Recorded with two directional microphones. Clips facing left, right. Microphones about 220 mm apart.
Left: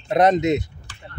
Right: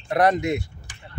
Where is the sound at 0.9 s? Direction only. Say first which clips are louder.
Left 2 dB; 15° right (ahead or behind).